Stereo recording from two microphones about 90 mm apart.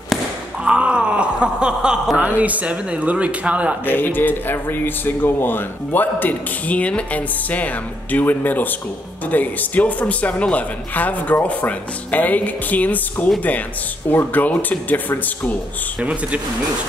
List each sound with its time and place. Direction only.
0.7 s speech: 10° right (ahead or behind)
3.8 s speech: 20° left (ahead or behind)
16.0 s speech: 15° right (ahead or behind)